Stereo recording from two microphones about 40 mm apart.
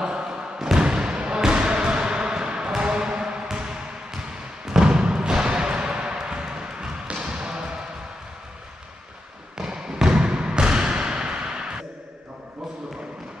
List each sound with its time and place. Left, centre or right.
0.0 s thump: centre
0.7 s basketball bounce: right
4.6 s music: centre
9.6 s a sound: centre